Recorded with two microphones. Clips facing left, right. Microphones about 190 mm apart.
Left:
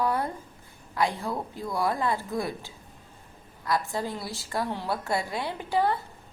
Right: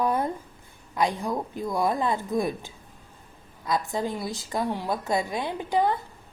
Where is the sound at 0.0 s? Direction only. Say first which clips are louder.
Right 2 dB; 20° right (ahead or behind).